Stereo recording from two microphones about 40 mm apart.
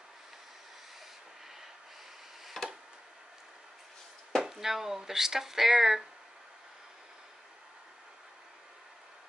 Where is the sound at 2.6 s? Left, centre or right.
Centre.